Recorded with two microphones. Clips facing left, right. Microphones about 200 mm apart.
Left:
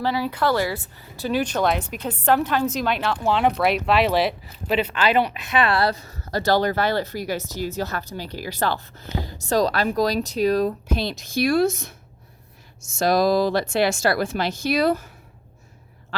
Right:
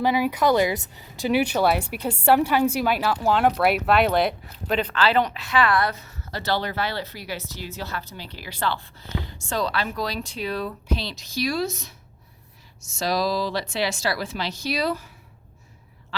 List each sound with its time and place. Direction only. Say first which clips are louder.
0.0 s a woman's voice: right 2 dB; 15° right (ahead or behind); by 11.9 s 50° left (ahead or behind)
13.0 s speech: left 6 dB; 50° left (ahead or behind)